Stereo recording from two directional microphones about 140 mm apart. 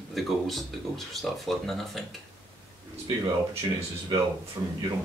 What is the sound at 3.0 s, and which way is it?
Speech, 45° right (ahead or behind).